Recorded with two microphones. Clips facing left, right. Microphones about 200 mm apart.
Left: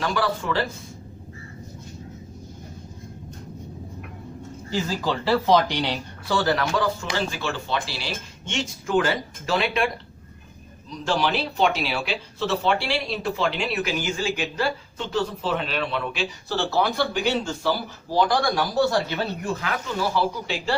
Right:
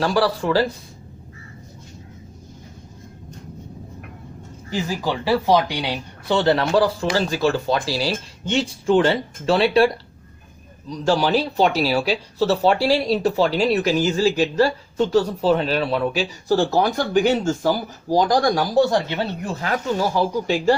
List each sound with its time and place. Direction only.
0.0 s speech: 35° right (ahead or behind)
4.7 s speech: 15° right (ahead or behind)
6.3 s speech: 25° right (ahead or behind)
18.9 s speech: 20° right (ahead or behind)
19.6 s speech: 40° right (ahead or behind)